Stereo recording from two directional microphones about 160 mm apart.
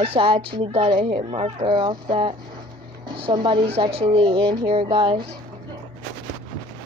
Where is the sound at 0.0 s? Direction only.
35° right (ahead or behind).